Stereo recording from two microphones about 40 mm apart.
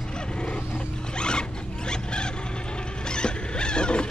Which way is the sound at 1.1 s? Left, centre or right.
Left.